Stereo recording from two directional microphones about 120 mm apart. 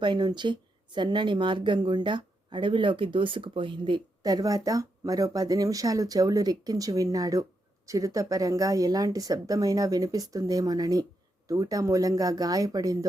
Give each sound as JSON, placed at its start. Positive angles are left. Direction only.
{"t": 0.0, "sound": "a woman's voice", "side_deg": -40}